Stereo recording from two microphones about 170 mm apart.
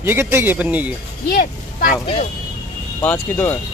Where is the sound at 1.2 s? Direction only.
70° left (ahead or behind).